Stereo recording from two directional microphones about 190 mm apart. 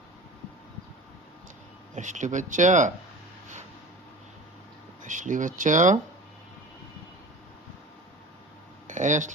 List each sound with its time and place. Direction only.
2.0 s speech: 40° right (ahead or behind)
5.0 s speech: 40° right (ahead or behind)
8.9 s speech: 40° right (ahead or behind)